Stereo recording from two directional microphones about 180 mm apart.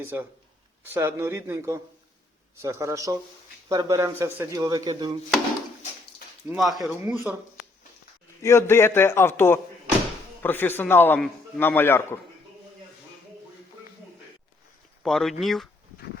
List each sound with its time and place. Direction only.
0.0 s speech: 15° right (ahead or behind)
6.5 s speech: centre (ahead or behind)
8.4 s a man's voice: 15° left (ahead or behind)
15.0 s speech: centre (ahead or behind)